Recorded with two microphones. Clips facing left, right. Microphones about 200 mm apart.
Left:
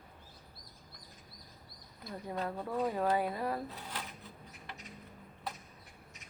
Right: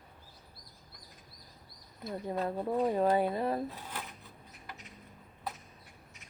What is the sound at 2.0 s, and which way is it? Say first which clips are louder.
A woman's voice: right 4 dB; 25° right (ahead or behind).